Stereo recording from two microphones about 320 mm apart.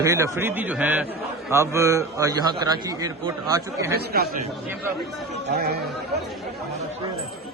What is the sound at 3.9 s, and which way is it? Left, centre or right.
Speech, right.